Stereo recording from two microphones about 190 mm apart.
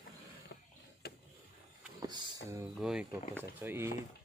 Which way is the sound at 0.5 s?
65° left (ahead or behind).